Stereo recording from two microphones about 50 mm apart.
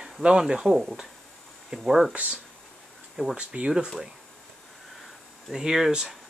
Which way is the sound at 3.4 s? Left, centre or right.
Centre.